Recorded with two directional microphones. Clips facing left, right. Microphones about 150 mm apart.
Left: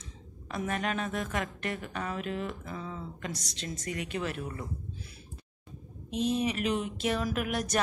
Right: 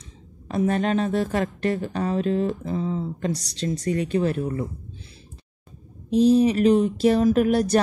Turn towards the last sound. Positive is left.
turn(degrees=-30)  # may be behind; listen again after turning